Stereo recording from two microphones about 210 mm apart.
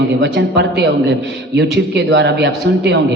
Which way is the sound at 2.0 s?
55° right (ahead or behind).